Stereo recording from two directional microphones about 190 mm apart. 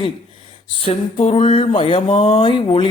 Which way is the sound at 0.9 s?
30° left (ahead or behind).